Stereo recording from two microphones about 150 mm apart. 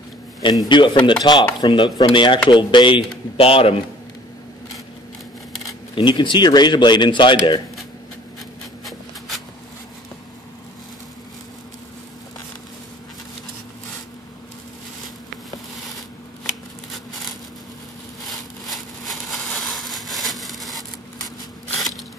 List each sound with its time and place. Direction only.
0.4 s a man's voice: 30° left (ahead or behind)
1.2 s chopping: 30° left (ahead or behind)
2.0 s a man's voice: 35° left (ahead or behind)
5.9 s a man's voice: 30° left (ahead or behind)
18.3 s a sound: centre (ahead or behind)